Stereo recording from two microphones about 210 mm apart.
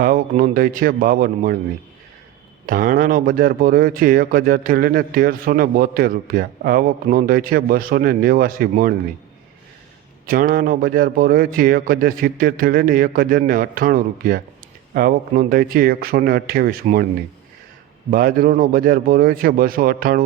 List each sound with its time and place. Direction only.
0.0 s speech: 45° right (ahead or behind)
2.6 s speech: 40° right (ahead or behind)
10.2 s speech: 45° right (ahead or behind)
18.1 s speech: 40° right (ahead or behind)